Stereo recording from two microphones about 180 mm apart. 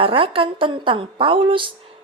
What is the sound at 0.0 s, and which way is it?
A woman's voice, 30° right (ahead or behind).